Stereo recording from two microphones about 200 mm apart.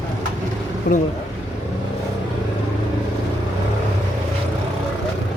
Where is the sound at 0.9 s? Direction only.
45° left (ahead or behind).